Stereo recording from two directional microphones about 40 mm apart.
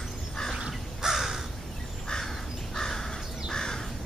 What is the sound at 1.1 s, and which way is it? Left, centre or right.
Crow, centre.